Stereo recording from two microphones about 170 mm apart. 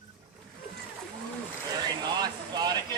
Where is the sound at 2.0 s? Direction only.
25° right (ahead or behind).